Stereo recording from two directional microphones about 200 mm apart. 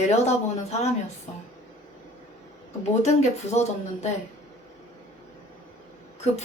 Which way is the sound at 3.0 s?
35° left (ahead or behind).